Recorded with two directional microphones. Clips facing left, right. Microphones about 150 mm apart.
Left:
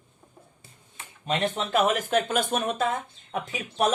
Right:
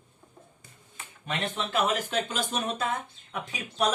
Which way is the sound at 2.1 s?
50° left (ahead or behind).